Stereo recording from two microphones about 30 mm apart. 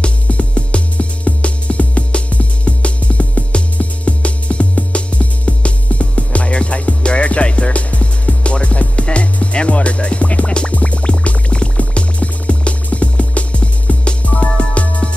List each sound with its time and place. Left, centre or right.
0.3 s music: left